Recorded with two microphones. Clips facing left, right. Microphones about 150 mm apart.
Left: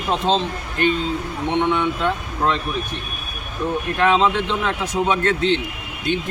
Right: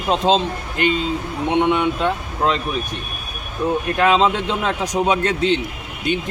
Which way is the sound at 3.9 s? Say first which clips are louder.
Even; 15° right (ahead or behind).